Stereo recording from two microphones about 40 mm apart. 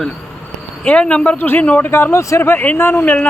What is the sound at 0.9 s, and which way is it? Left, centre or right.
Speech, left.